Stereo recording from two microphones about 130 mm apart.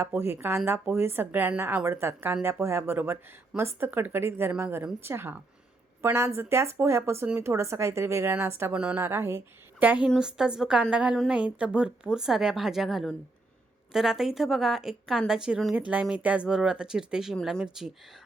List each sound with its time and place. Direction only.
0.0 s speech: 20° right (ahead or behind)
8.8 s speech: 5° right (ahead or behind)
9.0 s speech: 20° right (ahead or behind); by 17.9 s centre (ahead or behind)